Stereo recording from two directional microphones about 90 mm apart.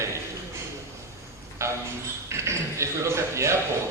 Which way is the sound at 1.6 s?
35° right (ahead or behind).